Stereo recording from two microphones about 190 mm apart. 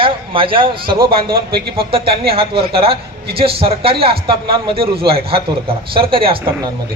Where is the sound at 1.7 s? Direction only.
30° right (ahead or behind).